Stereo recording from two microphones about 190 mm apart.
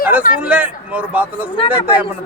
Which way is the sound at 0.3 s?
10° right (ahead or behind).